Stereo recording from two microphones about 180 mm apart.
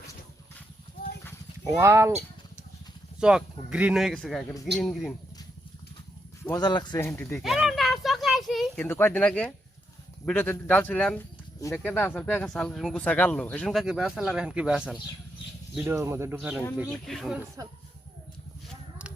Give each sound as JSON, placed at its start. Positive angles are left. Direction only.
{"t": 1.6, "sound": "speech", "side_deg": -15}
{"t": 3.2, "sound": "speech", "side_deg": -5}
{"t": 6.4, "sound": "speech", "side_deg": 20}
{"t": 7.4, "sound": "a sound", "side_deg": 0}
{"t": 8.8, "sound": "speech", "side_deg": 10}